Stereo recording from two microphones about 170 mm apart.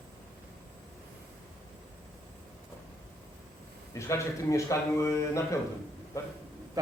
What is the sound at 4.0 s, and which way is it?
A man's voice, 15° left (ahead or behind).